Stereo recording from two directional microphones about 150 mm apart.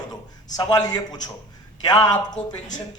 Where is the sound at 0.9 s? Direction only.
25° left (ahead or behind).